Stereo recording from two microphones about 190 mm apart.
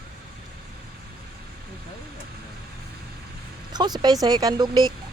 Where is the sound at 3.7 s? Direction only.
20° right (ahead or behind).